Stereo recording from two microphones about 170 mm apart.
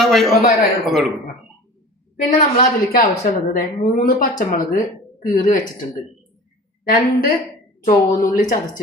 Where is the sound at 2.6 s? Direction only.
60° left (ahead or behind).